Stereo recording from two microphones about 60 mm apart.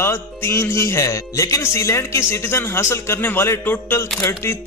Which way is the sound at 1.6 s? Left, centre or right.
Left.